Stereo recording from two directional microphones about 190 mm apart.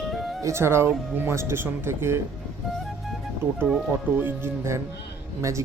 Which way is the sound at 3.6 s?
5° right (ahead or behind).